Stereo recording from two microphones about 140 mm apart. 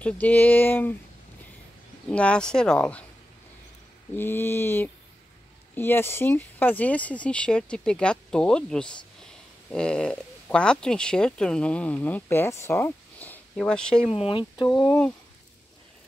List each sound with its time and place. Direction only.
0.0 s speech: 10° left (ahead or behind)
2.0 s speech: 10° left (ahead or behind)
4.2 s speech: 15° left (ahead or behind)
14.0 s speech: 45° left (ahead or behind)